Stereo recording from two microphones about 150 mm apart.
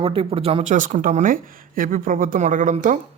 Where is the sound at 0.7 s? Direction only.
60° right (ahead or behind).